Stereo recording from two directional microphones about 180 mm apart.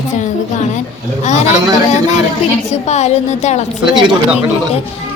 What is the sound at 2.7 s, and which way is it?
Speech, 40° left (ahead or behind).